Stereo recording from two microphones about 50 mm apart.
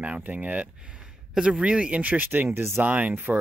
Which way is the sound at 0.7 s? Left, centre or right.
Centre.